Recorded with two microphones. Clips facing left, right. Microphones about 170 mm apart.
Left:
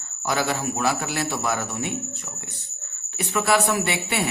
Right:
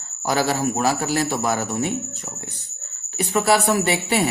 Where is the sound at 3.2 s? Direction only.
35° right (ahead or behind).